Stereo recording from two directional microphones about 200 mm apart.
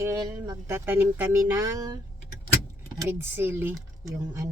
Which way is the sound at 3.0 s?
10° right (ahead or behind).